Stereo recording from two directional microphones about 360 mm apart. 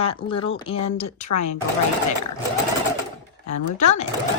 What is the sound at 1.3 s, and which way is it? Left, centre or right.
Speech, left.